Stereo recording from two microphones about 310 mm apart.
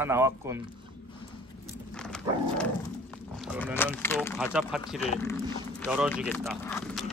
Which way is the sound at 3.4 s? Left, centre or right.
Centre.